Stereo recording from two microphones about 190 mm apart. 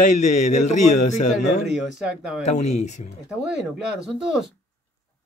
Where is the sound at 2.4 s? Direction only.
35° left (ahead or behind).